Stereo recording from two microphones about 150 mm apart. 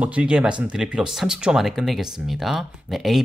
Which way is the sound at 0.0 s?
10° right (ahead or behind).